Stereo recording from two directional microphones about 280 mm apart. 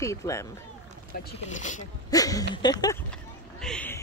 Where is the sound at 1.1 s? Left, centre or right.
Left.